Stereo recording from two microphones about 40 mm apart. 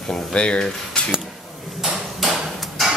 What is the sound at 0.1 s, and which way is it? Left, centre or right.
Cutlery, left.